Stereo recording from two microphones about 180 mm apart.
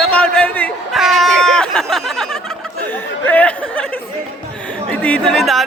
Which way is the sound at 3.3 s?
10° left (ahead or behind).